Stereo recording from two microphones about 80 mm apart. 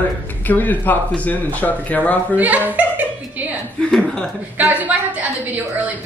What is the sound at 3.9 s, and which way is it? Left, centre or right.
Chuckle, centre.